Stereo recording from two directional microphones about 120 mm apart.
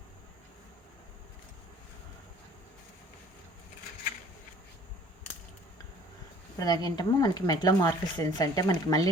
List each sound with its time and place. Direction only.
6.6 s speech: 35° left (ahead or behind)